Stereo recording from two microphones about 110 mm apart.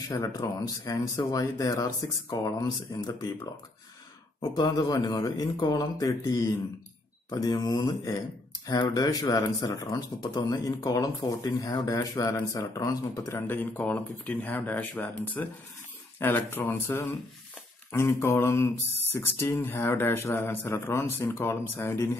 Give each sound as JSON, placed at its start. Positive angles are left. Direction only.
{"t": 0.2, "sound": "speech", "side_deg": 35}
{"t": 4.4, "sound": "speech", "side_deg": 35}
{"t": 13.5, "sound": "speech", "side_deg": 15}